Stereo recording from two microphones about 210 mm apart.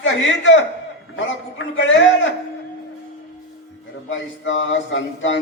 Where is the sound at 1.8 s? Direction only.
60° left (ahead or behind).